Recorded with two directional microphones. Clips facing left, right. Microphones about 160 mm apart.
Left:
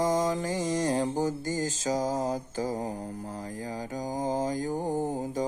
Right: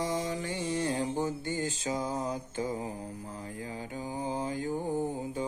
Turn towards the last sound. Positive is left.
turn(degrees=45)  # may be behind; listen again after turning